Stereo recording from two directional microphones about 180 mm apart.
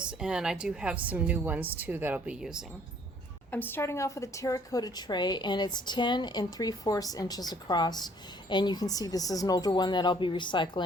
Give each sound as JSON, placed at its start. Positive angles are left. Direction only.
{"t": 0.0, "sound": "a woman's voice", "side_deg": -5}
{"t": 3.5, "sound": "a woman's voice", "side_deg": 10}